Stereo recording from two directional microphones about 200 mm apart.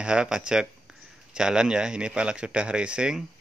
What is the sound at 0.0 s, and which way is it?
Speech, 5° right (ahead or behind).